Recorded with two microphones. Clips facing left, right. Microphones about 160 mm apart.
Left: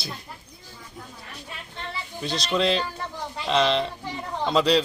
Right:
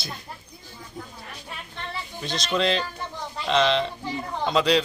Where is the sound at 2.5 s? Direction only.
Centre (ahead or behind).